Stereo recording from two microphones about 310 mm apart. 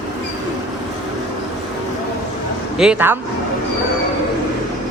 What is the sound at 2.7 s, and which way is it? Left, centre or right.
Speech, centre.